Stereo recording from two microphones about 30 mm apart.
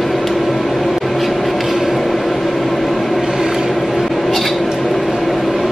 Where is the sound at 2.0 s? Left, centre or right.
Centre.